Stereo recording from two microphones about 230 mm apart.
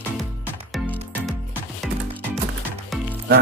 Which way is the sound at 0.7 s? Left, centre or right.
Centre.